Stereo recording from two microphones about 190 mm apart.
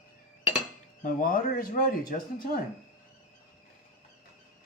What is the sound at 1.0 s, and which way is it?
Speech, 50° left (ahead or behind).